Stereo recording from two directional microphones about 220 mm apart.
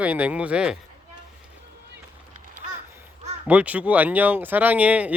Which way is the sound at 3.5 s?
5° right (ahead or behind).